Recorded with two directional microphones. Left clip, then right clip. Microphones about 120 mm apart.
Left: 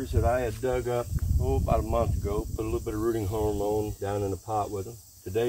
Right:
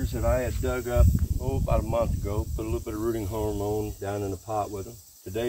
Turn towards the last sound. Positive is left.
turn(degrees=0)  # may be behind; listen again after turning